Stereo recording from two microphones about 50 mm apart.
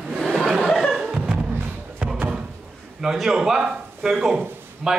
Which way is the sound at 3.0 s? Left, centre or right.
Centre.